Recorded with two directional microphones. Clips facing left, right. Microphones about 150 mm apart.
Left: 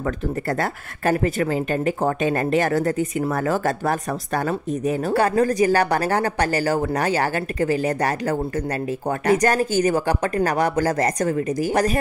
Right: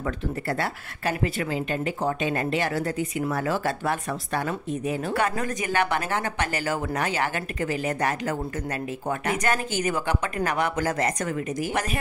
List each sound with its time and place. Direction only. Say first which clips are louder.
0.0 s speech: left 4 dB; 45° left (ahead or behind)